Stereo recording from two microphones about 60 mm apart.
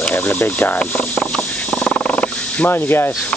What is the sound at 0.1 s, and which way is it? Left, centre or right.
Speech, left.